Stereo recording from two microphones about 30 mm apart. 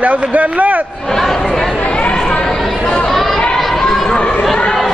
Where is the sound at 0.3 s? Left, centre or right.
Right.